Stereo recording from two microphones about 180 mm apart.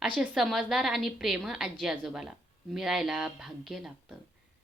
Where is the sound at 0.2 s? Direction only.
Centre (ahead or behind).